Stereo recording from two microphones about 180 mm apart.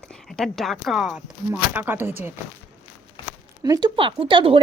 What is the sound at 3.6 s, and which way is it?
Speech, 20° right (ahead or behind).